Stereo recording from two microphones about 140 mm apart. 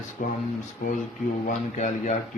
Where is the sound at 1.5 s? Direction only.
60° left (ahead or behind).